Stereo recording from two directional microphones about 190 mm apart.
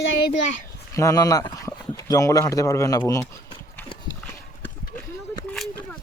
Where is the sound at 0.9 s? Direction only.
15° left (ahead or behind).